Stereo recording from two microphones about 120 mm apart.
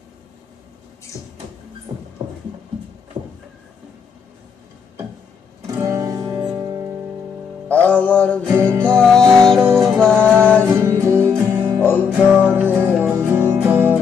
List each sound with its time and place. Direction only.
5.8 s music: 25° right (ahead or behind)
7.6 s music: 10° left (ahead or behind)
8.5 s music: 20° right (ahead or behind)
8.9 s music: 5° left (ahead or behind)
9.6 s music: 20° right (ahead or behind)
9.9 s music: 10° left (ahead or behind)
10.8 s music: 25° right (ahead or behind)